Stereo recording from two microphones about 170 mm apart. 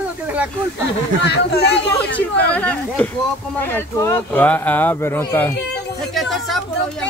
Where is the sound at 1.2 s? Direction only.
75° left (ahead or behind).